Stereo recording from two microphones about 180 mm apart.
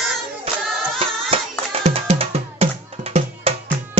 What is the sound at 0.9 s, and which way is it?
Music, 30° right (ahead or behind).